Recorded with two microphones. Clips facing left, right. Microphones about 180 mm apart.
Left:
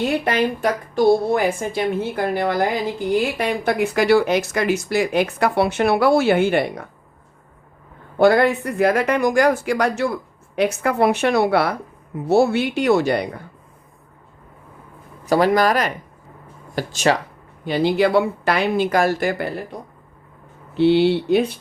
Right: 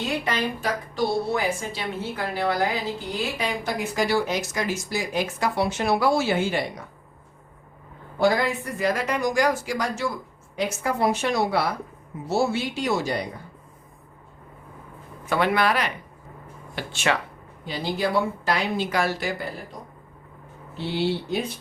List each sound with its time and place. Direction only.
0.0 s a woman's voice: 55° left (ahead or behind)
8.2 s speech: 60° left (ahead or behind)
15.3 s speech: 40° left (ahead or behind)
17.7 s speech: 65° left (ahead or behind)
20.7 s speech: 70° left (ahead or behind)